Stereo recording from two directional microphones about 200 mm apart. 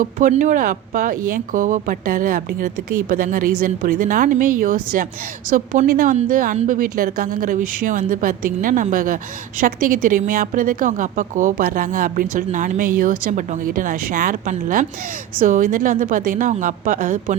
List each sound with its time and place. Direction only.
0.0 s a woman's voice: 40° right (ahead or behind)